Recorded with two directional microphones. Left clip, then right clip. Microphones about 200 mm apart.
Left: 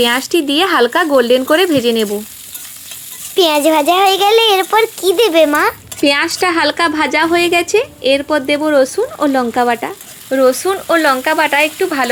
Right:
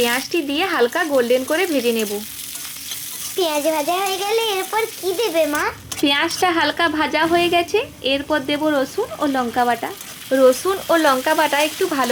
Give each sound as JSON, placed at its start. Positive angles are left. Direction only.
{"t": 0.0, "sound": "speech", "side_deg": 40}
{"t": 3.3, "sound": "a child's voice", "side_deg": 50}
{"t": 6.0, "sound": "a woman's voice", "side_deg": 15}
{"t": 10.2, "sound": "speech", "side_deg": 5}